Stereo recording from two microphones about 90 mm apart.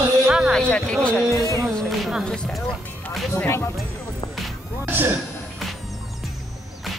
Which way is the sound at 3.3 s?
30° left (ahead or behind).